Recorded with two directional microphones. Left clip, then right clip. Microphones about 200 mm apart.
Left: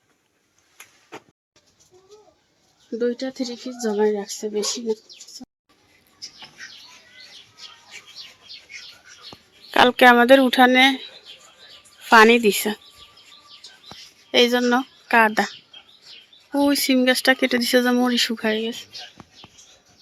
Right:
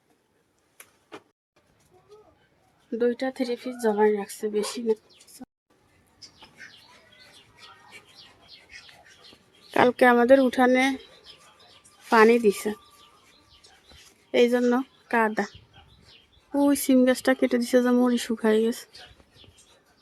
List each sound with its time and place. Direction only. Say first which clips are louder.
3.0 s speech: left 1 dB; 5° right (ahead or behind)
9.7 s speech: left 6 dB; 5° right (ahead or behind)
14.3 s speech: left 3 dB; 10° right (ahead or behind)
16.6 s speech: left 2 dB; 15° right (ahead or behind)
18.6 s speech: right 2 dB; 35° right (ahead or behind)